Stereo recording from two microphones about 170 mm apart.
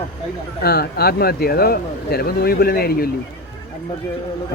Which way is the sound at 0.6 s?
65° left (ahead or behind).